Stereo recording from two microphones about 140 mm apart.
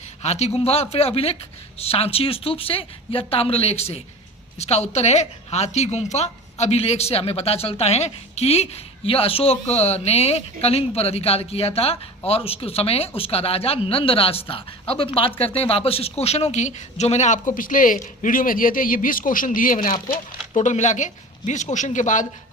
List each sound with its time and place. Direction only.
0.2 s a woman's voice: 50° left (ahead or behind); by 20.1 s 70° left (ahead or behind)
20.6 s speech: 55° left (ahead or behind)